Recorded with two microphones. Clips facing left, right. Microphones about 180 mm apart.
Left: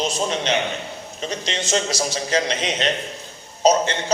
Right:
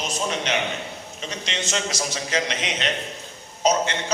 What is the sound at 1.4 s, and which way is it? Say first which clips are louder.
A man's voice: left 4 dB; 35° left (ahead or behind).